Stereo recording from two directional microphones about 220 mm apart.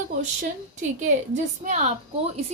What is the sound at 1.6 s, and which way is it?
Speech, 30° right (ahead or behind).